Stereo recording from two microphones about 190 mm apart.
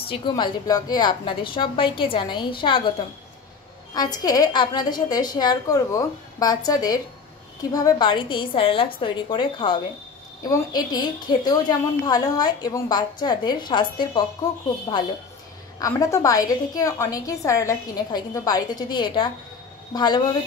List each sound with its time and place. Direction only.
0.1 s a woman's voice: 20° left (ahead or behind)